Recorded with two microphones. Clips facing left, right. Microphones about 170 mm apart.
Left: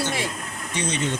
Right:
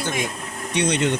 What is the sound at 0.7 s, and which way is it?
Speech, 70° right (ahead or behind).